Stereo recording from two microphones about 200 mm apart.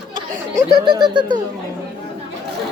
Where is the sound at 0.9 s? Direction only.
20° right (ahead or behind).